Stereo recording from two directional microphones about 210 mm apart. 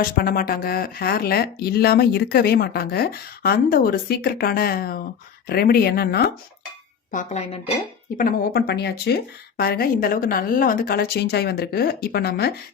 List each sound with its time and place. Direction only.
0.2 s speech: 45° left (ahead or behind)
7.1 s a woman's voice: 35° left (ahead or behind)
8.2 s speech: 50° left (ahead or behind)